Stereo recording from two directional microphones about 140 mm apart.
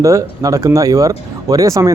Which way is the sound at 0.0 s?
25° right (ahead or behind).